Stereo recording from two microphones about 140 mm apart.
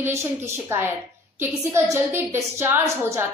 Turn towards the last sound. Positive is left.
turn(degrees=-20)  # may be behind; listen again after turning